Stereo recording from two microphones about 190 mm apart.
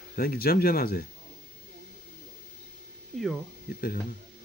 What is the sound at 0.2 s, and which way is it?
Speech, 50° left (ahead or behind).